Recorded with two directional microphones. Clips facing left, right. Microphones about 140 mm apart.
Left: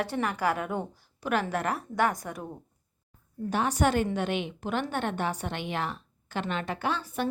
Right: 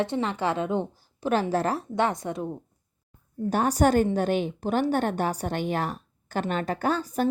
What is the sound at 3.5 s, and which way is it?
A woman's voice, 40° right (ahead or behind).